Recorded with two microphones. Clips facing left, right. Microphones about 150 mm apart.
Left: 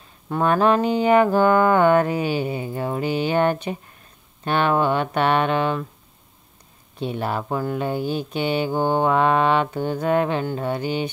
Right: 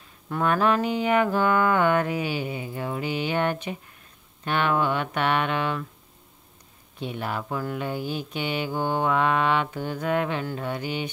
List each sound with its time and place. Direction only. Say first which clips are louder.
0.3 s mantra: left 4 dB; 30° left (ahead or behind)
7.0 s mantra: left 5 dB; 35° left (ahead or behind)